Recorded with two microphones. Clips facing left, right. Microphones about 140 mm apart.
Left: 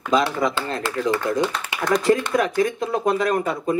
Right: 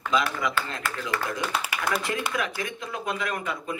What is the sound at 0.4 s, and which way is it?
Speech, 35° left (ahead or behind).